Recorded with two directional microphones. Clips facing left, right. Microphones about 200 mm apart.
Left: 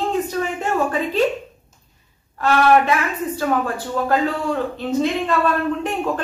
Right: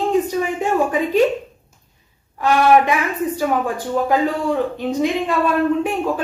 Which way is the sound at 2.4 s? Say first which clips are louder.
Right 1 dB; 15° right (ahead or behind).